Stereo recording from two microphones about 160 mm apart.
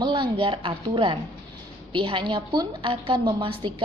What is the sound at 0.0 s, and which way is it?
A woman's voice, 30° right (ahead or behind).